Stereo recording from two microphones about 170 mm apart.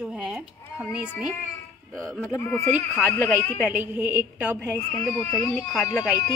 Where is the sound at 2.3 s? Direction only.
15° left (ahead or behind).